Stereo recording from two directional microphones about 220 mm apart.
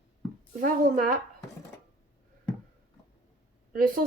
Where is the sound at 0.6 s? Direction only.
40° right (ahead or behind).